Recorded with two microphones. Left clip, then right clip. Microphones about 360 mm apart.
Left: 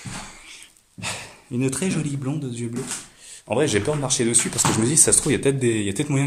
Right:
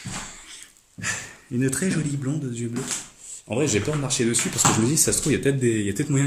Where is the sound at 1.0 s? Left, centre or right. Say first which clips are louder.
Right 2 dB; centre.